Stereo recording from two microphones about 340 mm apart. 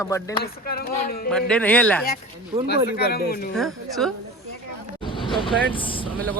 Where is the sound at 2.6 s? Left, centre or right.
Left.